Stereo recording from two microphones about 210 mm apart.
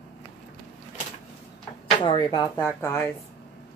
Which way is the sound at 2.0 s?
20° left (ahead or behind).